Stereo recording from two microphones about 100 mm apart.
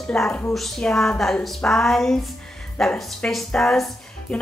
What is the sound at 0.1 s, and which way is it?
A woman's voice, 5° left (ahead or behind).